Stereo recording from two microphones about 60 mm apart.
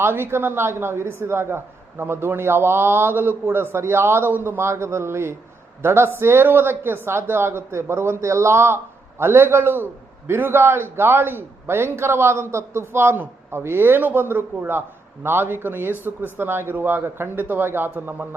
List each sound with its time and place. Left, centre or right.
0.0 s a woman's voice: right